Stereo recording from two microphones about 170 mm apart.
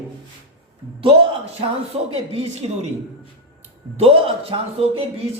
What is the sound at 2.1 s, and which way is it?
Speech, 40° right (ahead or behind).